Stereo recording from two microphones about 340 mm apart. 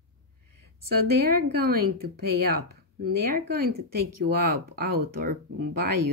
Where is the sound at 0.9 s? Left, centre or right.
Right.